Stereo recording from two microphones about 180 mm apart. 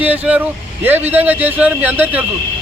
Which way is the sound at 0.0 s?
10° right (ahead or behind).